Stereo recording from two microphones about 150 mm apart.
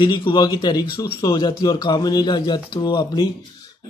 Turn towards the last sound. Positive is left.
turn(degrees=30)  # may be behind; listen again after turning